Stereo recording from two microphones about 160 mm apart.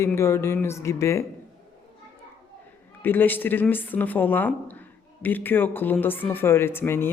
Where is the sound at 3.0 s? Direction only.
10° left (ahead or behind).